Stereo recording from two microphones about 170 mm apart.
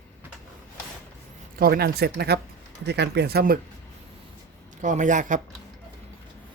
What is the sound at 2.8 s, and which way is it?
Speech, 85° right.